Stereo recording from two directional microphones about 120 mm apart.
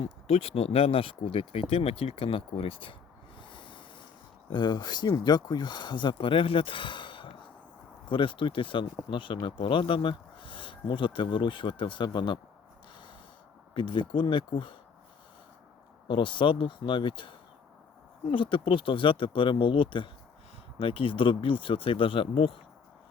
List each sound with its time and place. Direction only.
0.3 s speech: 55° left (ahead or behind)
3.4 s a sound: 40° left (ahead or behind)
4.4 s speech: 40° left (ahead or behind)
13.7 s speech: 40° left (ahead or behind)
16.0 s speech: 45° left (ahead or behind)